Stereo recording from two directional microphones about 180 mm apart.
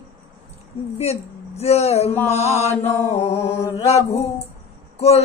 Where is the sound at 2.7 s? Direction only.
15° left (ahead or behind).